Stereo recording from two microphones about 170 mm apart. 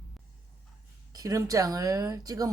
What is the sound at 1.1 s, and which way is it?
Speech, 20° right (ahead or behind).